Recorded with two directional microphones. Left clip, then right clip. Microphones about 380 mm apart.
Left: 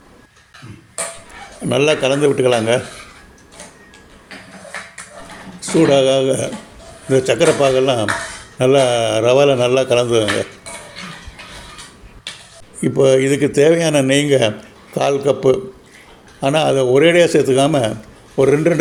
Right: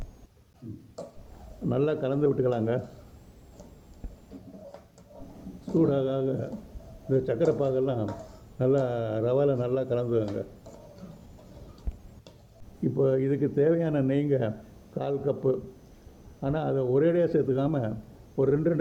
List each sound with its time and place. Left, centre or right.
1.7 s a man's voice: right
5.9 s a man's voice: right
12.8 s a man's voice: right